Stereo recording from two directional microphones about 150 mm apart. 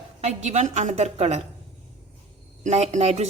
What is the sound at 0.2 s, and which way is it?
A woman's voice, 45° right (ahead or behind).